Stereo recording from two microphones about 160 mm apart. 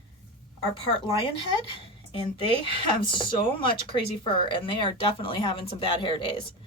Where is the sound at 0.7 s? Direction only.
30° left (ahead or behind).